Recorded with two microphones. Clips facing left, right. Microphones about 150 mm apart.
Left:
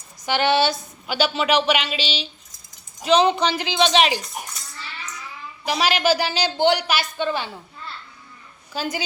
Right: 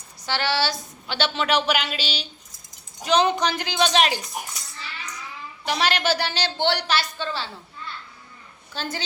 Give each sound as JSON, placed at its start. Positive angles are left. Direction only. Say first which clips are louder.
{"t": 0.3, "sound": "a woman's voice", "louder": "left 5 dB", "side_deg": 20}
{"t": 1.0, "sound": "a woman's voice", "louder": "left 3 dB", "side_deg": 10}
{"t": 5.6, "sound": "a woman's voice", "louder": "left 3 dB", "side_deg": 5}
{"t": 8.7, "sound": "a woman's voice", "louder": "left 4 dB", "side_deg": 10}